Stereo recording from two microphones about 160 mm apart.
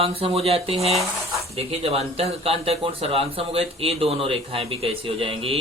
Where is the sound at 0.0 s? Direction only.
35° right (ahead or behind).